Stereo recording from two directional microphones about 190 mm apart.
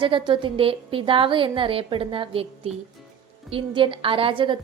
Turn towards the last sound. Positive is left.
turn(degrees=-25)  # may be behind; listen again after turning